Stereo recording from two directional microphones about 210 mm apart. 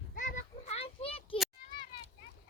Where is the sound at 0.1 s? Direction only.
45° left (ahead or behind).